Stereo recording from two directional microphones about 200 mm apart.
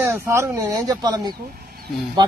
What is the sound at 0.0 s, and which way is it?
Speech, 15° right (ahead or behind).